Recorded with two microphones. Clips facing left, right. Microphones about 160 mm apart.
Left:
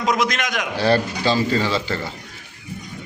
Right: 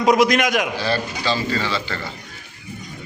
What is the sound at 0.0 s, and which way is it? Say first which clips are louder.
Speech: right 6 dB; 20° right (ahead or behind).